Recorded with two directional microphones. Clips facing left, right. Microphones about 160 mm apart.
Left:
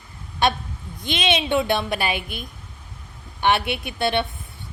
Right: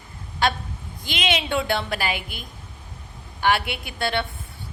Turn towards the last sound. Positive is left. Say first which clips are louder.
# left 3 dB
turn(degrees=20)  # may be behind; listen again after turning